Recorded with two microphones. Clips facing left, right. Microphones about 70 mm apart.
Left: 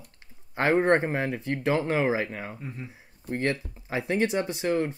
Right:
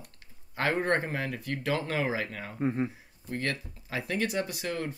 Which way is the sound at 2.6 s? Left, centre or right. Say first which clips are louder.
Right 11 dB; right.